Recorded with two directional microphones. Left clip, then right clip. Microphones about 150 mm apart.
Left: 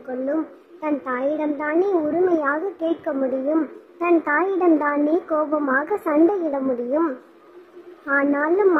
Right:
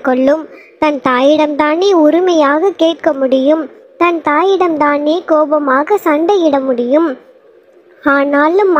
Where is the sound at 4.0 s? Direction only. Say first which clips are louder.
Right 8 dB; 40° right (ahead or behind).